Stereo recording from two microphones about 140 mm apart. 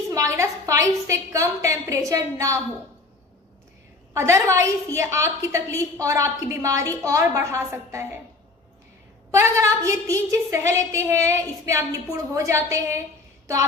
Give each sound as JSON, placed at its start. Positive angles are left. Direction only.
{"t": 0.1, "sound": "a woman's voice", "side_deg": -20}
{"t": 4.1, "sound": "a woman's voice", "side_deg": -20}
{"t": 9.3, "sound": "a woman's voice", "side_deg": -20}